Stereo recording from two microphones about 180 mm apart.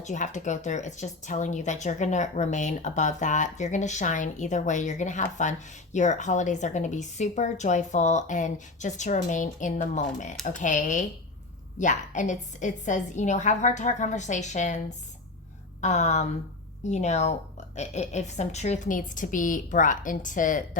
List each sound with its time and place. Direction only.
0.0 s a woman's voice: 40° left (ahead or behind)